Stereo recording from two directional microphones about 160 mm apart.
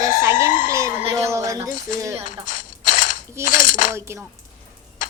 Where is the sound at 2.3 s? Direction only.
55° left (ahead or behind).